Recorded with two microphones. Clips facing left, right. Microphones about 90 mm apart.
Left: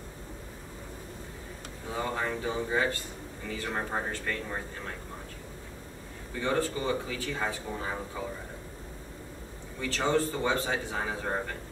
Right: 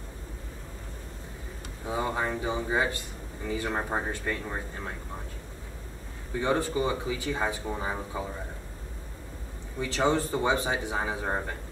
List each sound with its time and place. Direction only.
1.9 s speech: 15° right (ahead or behind)
6.4 s speech: 15° right (ahead or behind)
9.8 s speech: 15° right (ahead or behind)